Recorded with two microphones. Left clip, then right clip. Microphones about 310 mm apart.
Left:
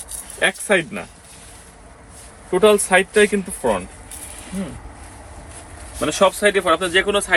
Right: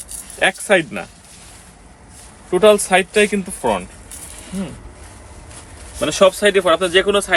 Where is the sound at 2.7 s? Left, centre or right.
Right.